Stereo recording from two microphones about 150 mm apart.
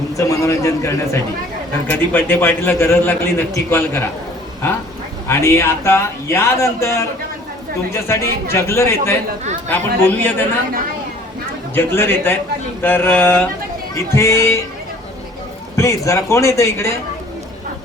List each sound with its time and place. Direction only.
0.2 s a man's voice: 20° left (ahead or behind)
5.3 s a man's voice: 20° left (ahead or behind)
11.7 s a man's voice: 15° left (ahead or behind)
15.7 s a man's voice: 20° left (ahead or behind)